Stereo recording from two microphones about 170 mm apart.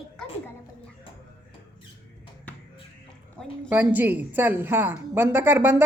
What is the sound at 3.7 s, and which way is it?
A woman's voice, 10° right (ahead or behind).